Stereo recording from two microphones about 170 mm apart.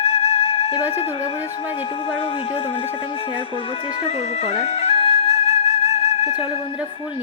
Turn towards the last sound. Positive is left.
turn(degrees=40)  # may be behind; listen again after turning